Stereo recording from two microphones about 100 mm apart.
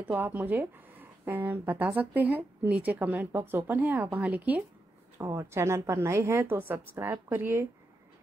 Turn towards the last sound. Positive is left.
turn(degrees=-20)  # may be behind; listen again after turning